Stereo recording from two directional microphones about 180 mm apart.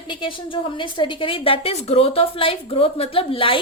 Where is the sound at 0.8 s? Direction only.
25° left (ahead or behind).